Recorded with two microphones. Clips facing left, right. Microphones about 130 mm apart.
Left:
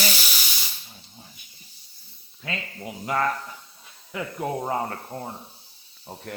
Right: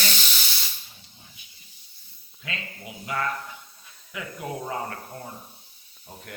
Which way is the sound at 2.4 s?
35° left (ahead or behind).